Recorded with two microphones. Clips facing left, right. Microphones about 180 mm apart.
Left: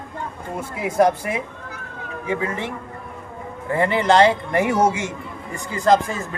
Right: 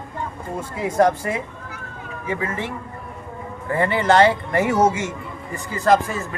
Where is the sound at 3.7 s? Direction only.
20° left (ahead or behind).